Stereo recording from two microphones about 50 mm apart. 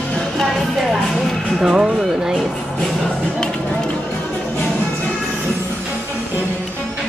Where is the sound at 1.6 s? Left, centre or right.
Centre.